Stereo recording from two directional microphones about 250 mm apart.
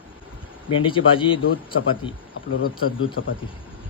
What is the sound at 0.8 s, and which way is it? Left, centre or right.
Speech, centre.